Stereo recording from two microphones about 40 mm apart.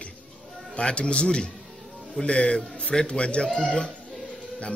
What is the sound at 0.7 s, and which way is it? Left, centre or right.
A man's voice, left.